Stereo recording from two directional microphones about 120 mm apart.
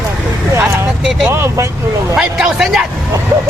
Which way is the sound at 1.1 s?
5° right (ahead or behind).